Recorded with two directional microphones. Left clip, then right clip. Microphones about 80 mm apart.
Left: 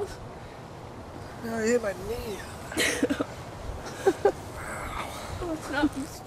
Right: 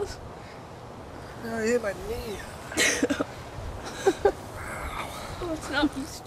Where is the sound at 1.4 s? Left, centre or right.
Centre.